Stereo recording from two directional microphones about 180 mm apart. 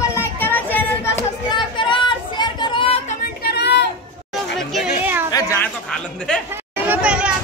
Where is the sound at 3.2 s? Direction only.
65° left (ahead or behind).